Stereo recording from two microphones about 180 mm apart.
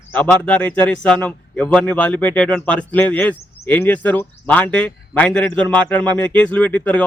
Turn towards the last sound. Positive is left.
turn(degrees=10)  # may be behind; listen again after turning